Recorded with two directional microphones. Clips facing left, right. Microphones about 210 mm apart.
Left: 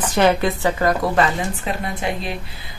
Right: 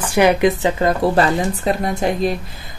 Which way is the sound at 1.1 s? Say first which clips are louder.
Right 3 dB; 40° right (ahead or behind).